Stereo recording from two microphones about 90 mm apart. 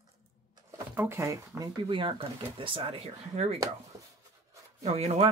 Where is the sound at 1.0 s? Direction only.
30° right (ahead or behind).